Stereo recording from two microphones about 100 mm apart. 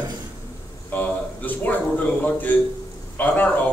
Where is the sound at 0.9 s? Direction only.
15° left (ahead or behind).